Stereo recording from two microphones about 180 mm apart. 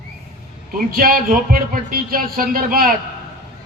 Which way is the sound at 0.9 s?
55° right (ahead or behind).